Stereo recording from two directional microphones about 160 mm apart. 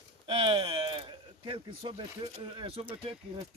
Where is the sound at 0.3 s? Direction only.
35° right (ahead or behind).